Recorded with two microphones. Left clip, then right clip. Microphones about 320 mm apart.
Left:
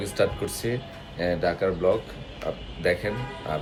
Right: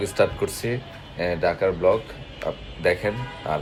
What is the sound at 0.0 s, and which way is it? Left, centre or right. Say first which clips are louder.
Speech: right 4 dB; centre.